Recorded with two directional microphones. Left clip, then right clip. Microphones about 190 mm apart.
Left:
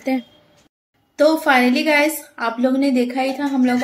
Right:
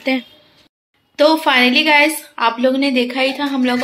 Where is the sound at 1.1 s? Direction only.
10° left (ahead or behind).